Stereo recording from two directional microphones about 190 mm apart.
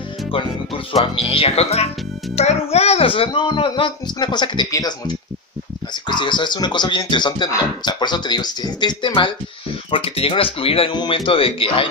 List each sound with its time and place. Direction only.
0.9 s speech: 30° left (ahead or behind)